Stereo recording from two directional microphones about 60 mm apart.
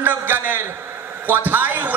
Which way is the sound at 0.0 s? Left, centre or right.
Right.